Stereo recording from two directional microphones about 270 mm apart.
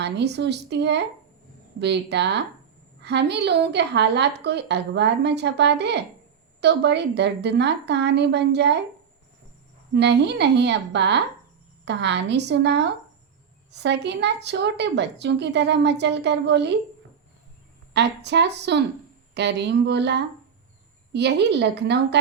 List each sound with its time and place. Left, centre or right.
0.0 s a woman's voice: right
9.9 s a woman's voice: right
17.9 s a woman's voice: right